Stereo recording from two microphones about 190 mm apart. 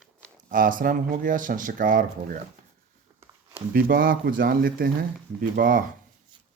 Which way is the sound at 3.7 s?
50° right (ahead or behind).